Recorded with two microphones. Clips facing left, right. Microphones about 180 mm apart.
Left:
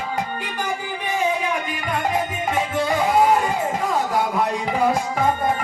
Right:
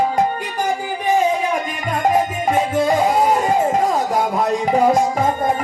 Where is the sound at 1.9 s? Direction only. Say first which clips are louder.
Right 6 dB; 45° right (ahead or behind).